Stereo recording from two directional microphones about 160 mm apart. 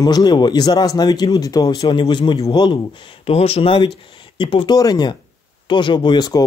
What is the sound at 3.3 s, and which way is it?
Speech, 40° left (ahead or behind).